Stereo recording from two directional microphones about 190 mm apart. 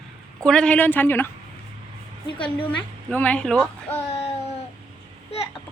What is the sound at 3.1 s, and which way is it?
Speech, 10° left (ahead or behind).